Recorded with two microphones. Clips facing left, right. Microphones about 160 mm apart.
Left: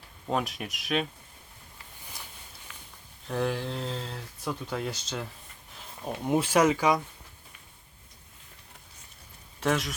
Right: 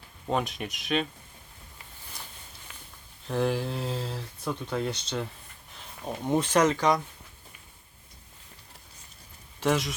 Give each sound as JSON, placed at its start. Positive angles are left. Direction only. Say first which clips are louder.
{"t": 0.3, "sound": "speech", "louder": "right 1 dB", "side_deg": 0}
{"t": 3.2, "sound": "speech", "louder": "right 2 dB", "side_deg": 0}
{"t": 9.6, "sound": "speech", "louder": "right 1 dB", "side_deg": 0}